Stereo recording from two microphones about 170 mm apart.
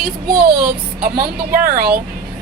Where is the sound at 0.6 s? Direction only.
60° right (ahead or behind).